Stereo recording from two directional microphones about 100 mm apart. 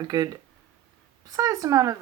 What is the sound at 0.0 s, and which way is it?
Speech, 40° right (ahead or behind).